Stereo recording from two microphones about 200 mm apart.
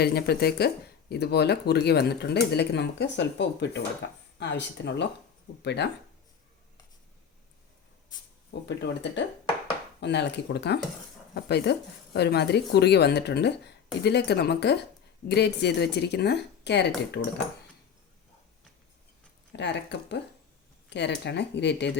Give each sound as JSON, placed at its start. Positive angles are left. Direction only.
{"t": 0.0, "sound": "a woman's voice", "side_deg": 50}
{"t": 8.6, "sound": "a woman's voice", "side_deg": 60}
{"t": 19.5, "sound": "a woman's voice", "side_deg": 60}